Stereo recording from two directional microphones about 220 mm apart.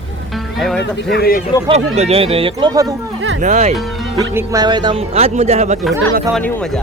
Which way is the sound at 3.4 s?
35° right (ahead or behind).